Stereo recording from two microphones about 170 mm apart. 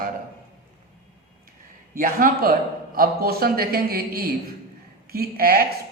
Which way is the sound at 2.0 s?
55° right (ahead or behind).